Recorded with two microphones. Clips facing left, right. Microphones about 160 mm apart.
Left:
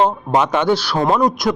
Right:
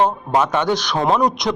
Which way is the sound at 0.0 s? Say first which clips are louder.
Left 1 dB; 15° left (ahead or behind).